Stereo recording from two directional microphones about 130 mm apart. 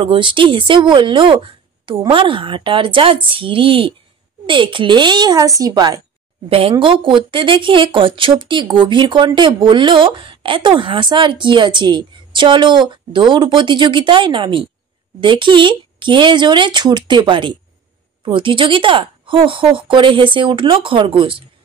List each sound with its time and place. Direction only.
0.0 s a woman's voice: 40° right (ahead or behind)
6.5 s a woman's voice: 45° right (ahead or behind)